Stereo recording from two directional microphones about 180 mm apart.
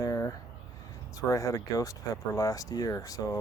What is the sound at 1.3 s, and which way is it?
Speech, 20° left (ahead or behind).